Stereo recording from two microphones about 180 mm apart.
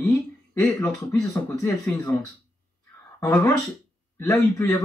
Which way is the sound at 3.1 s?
15° left (ahead or behind).